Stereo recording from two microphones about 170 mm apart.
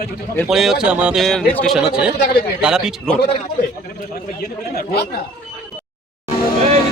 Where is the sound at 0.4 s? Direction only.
Centre (ahead or behind).